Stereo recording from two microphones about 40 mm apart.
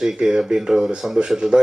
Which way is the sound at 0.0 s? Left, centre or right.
Centre.